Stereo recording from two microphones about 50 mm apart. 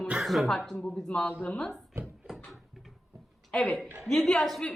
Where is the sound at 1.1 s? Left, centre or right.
Left.